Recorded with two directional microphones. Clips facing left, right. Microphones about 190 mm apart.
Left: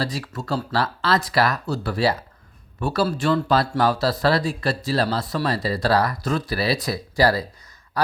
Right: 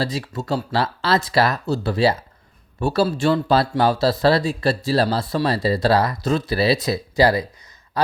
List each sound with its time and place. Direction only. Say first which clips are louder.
0.0 s speech: right 3 dB; 25° right (ahead or behind)